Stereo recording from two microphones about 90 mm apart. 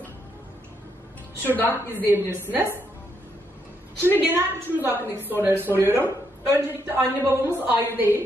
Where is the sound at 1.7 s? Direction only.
20° right (ahead or behind).